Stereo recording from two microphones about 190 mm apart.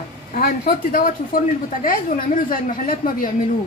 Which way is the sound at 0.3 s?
50° left (ahead or behind).